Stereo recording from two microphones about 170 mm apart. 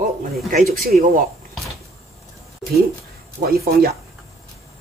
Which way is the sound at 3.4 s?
65° right (ahead or behind).